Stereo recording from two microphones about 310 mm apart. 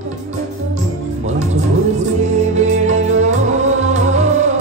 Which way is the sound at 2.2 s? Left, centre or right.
Right.